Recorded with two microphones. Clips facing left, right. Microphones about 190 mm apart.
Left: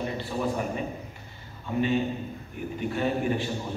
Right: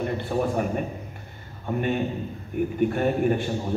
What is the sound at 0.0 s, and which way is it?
A man's voice, 55° right (ahead or behind).